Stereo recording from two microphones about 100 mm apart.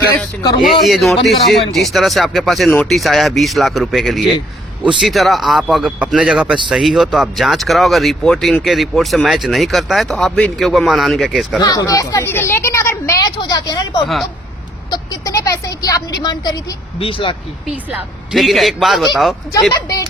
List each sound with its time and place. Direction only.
0.7 s speech: centre (ahead or behind)
11.6 s speech: 35° left (ahead or behind)
13.2 s a woman's voice: 40° left (ahead or behind)
14.8 s a woman's voice: 45° left (ahead or behind)
17.0 s speech: 65° left (ahead or behind)
17.7 s speech: 10° right (ahead or behind)
18.3 s speech: centre (ahead or behind)
19.7 s a woman's voice: 35° left (ahead or behind)